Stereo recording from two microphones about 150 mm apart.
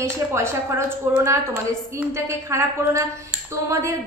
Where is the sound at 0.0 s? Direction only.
20° right (ahead or behind).